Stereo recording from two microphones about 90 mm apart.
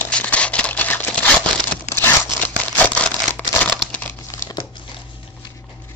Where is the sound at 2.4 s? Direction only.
20° left (ahead or behind).